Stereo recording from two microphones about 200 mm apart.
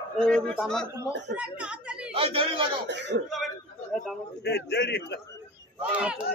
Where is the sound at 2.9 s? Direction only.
60° right (ahead or behind).